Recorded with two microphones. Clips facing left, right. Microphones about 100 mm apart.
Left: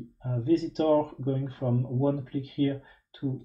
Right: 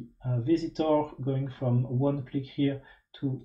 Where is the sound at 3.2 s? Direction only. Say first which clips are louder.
Even; centre (ahead or behind).